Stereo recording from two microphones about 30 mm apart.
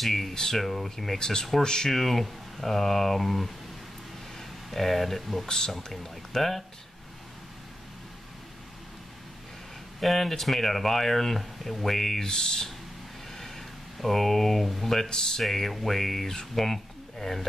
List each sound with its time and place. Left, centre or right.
0.0 s speech: centre
0.3 s speech: centre
0.6 s speech: centre; by 1.9 s left
1.9 s speech: centre
4.6 s speech: centre
5.8 s speech: centre
9.9 s speech: centre
12.3 s speech: centre
13.3 s a sound: centre
15.0 s speech: left
15.4 s speech: centre